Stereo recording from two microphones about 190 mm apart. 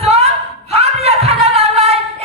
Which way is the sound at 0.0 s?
35° right (ahead or behind).